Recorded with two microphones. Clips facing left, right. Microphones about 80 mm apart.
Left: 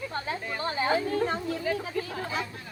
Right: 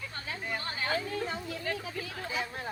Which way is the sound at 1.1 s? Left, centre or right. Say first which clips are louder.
Left 7 dB; left.